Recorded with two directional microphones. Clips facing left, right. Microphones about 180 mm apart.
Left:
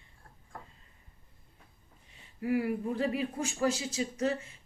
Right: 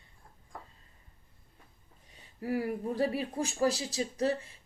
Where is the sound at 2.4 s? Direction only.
40° right (ahead or behind).